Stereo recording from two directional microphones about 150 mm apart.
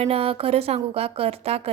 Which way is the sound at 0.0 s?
40° right (ahead or behind).